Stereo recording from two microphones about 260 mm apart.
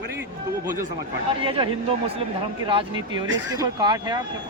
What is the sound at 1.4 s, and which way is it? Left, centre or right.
A man's voice, centre.